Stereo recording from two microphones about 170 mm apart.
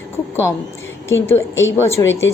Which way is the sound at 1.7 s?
15° left (ahead or behind).